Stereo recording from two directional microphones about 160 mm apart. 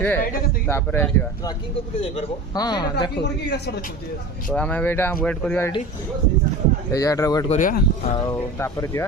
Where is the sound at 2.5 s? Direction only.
25° left (ahead or behind).